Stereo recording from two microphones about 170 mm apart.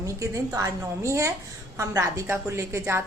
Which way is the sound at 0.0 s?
20° right (ahead or behind).